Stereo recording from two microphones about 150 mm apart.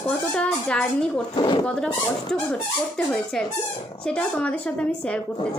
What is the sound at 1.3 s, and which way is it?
Speech, 30° left (ahead or behind).